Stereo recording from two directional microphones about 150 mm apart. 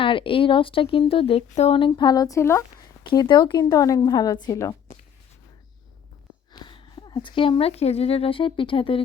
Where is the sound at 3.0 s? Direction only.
30° left (ahead or behind).